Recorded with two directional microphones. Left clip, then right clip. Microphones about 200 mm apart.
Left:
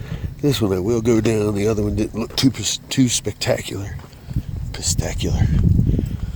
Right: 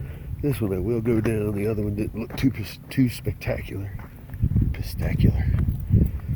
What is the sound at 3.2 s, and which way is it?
Speech, 20° left (ahead or behind).